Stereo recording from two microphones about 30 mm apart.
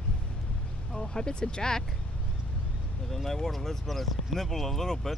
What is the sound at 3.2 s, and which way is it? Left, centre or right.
Speech, centre.